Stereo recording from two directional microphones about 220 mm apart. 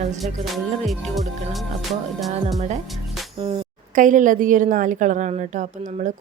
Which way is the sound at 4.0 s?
35° right (ahead or behind).